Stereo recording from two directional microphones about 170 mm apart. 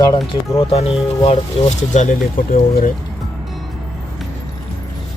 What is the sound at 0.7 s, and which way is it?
Speech, 35° left (ahead or behind).